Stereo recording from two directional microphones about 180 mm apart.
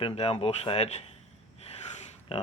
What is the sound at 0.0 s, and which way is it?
Speech, 35° left (ahead or behind).